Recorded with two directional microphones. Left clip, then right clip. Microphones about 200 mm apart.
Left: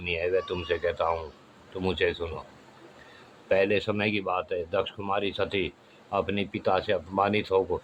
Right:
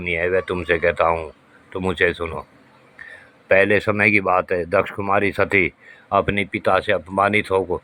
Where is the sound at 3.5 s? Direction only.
20° right (ahead or behind).